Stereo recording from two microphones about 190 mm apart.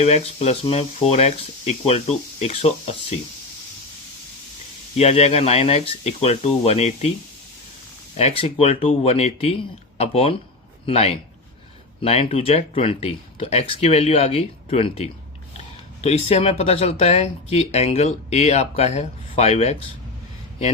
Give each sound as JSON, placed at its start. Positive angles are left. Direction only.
{"t": 0.0, "sound": "speech", "side_deg": 35}
{"t": 4.9, "sound": "speech", "side_deg": 35}
{"t": 8.1, "sound": "speech", "side_deg": 30}